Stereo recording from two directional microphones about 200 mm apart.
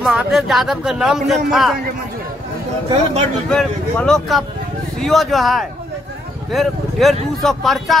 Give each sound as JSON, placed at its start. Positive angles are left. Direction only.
{"t": 0.0, "sound": "speech", "side_deg": 0}
{"t": 3.4, "sound": "speech", "side_deg": 5}